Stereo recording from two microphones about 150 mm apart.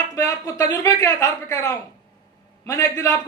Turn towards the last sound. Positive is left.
turn(degrees=20)  # may be behind; listen again after turning